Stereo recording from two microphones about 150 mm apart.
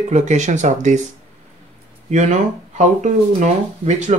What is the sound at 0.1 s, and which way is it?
Speech, 50° right (ahead or behind).